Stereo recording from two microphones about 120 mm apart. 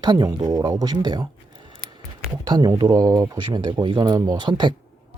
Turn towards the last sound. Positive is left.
turn(degrees=-40)  # may be behind; listen again after turning